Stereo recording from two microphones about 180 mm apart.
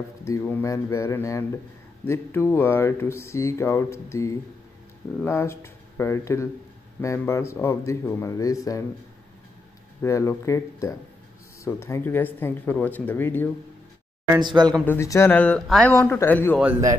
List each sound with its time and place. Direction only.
0.2 s speech: 15° left (ahead or behind)
10.0 s speech: 15° left (ahead or behind)
14.4 s speech: 25° right (ahead or behind)
14.9 s speech: 15° left (ahead or behind)